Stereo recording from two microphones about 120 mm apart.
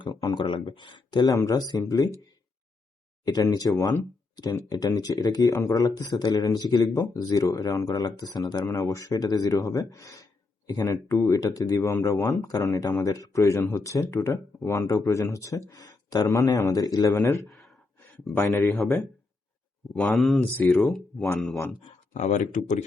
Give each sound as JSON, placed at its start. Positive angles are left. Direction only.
{"t": 0.0, "sound": "a sound", "side_deg": 35}
{"t": 0.4, "sound": "speech", "side_deg": 40}
{"t": 3.2, "sound": "speech", "side_deg": 30}
{"t": 17.5, "sound": "gasp", "side_deg": 0}
{"t": 18.3, "sound": "speech", "side_deg": 25}
{"t": 18.7, "sound": "speech", "side_deg": 15}
{"t": 19.9, "sound": "speech", "side_deg": 5}
{"t": 20.4, "sound": "speech", "side_deg": 15}
{"t": 20.8, "sound": "speech", "side_deg": 0}
{"t": 22.1, "sound": "speech", "side_deg": 70}